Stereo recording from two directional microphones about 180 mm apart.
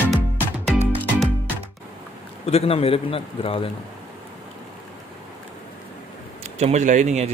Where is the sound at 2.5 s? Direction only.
35° left (ahead or behind).